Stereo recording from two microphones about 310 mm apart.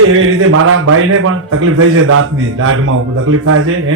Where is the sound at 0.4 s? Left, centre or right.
Right.